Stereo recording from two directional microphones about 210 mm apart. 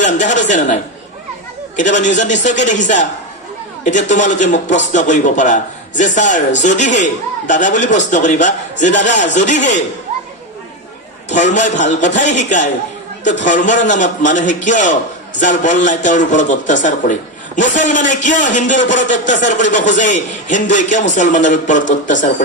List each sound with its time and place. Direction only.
0.0 s a man's voice: 35° left (ahead or behind)
11.3 s a man's voice: 35° left (ahead or behind)